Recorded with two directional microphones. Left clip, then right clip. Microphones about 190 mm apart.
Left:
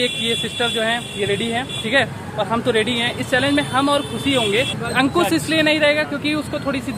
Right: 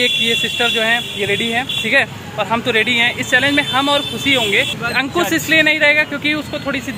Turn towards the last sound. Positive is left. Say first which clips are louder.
# right 2 dB
turn(degrees=0)  # may be behind; listen again after turning